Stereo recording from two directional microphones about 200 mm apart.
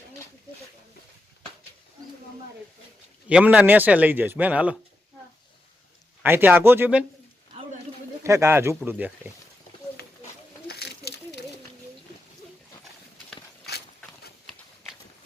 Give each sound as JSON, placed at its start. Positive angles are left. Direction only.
{"t": 3.2, "sound": "a man's voice", "side_deg": -5}
{"t": 6.2, "sound": "a man's voice", "side_deg": -10}
{"t": 8.2, "sound": "a man's voice", "side_deg": -15}
{"t": 10.7, "sound": "a sound", "side_deg": 55}
{"t": 13.7, "sound": "horse", "side_deg": 55}